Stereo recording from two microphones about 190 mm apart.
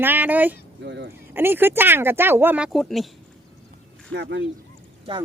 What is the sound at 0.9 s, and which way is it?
Speech, 65° right (ahead or behind).